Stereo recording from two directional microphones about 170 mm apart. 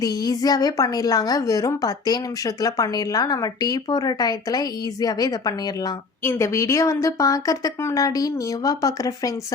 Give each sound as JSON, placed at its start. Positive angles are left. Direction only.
{"t": 0.0, "sound": "a woman's voice", "side_deg": 20}